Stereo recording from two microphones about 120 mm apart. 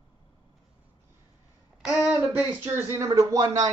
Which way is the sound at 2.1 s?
15° right (ahead or behind).